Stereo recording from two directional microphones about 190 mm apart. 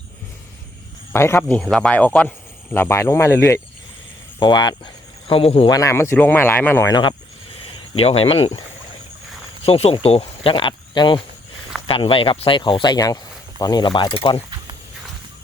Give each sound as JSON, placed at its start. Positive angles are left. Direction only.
{"t": 1.1, "sound": "speech", "side_deg": 15}
{"t": 7.5, "sound": "speech", "side_deg": 30}
{"t": 9.6, "sound": "speech", "side_deg": 30}